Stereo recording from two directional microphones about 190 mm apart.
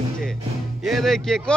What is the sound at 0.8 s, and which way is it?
Music, centre (ahead or behind).